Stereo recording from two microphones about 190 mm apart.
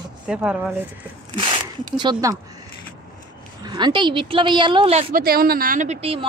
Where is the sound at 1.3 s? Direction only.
25° right (ahead or behind).